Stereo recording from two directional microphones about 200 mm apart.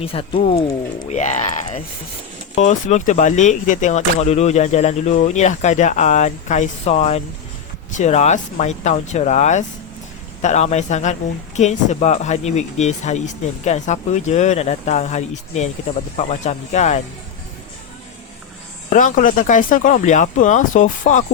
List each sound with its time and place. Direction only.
0.0 s speech: 30° left (ahead or behind)
18.9 s speech: 40° left (ahead or behind)